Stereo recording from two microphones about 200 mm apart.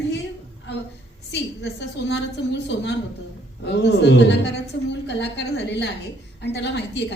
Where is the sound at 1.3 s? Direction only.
60° left (ahead or behind).